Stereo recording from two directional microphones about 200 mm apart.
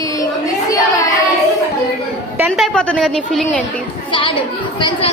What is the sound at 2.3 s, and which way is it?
A woman's voice, centre (ahead or behind).